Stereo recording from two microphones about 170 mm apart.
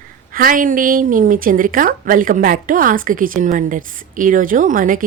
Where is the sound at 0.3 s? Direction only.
55° right (ahead or behind).